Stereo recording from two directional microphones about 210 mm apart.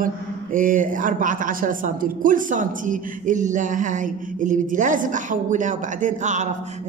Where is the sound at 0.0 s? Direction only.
40° right (ahead or behind).